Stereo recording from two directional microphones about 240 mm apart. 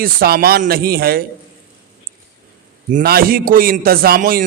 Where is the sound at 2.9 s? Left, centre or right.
Right.